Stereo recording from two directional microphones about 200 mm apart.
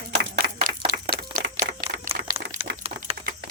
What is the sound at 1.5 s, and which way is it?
Typewriter, 40° right (ahead or behind).